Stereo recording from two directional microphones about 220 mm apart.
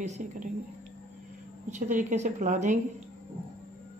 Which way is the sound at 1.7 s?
35° right (ahead or behind).